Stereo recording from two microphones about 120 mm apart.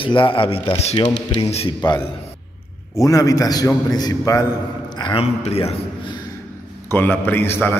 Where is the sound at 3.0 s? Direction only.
30° left (ahead or behind).